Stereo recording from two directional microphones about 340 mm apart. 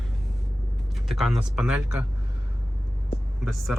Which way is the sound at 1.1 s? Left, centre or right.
Centre.